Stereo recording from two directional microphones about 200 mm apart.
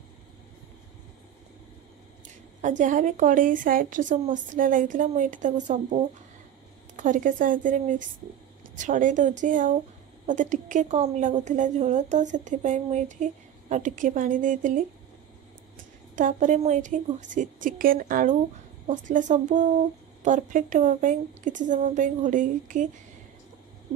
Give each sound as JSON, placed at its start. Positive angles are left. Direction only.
{"t": 2.6, "sound": "a woman's voice", "side_deg": -40}
{"t": 16.2, "sound": "a woman's voice", "side_deg": -40}